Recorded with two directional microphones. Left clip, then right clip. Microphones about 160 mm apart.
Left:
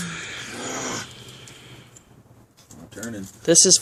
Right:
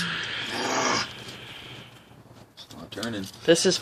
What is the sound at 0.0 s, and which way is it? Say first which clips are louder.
Groan: right 4 dB; 55° left (ahead or behind).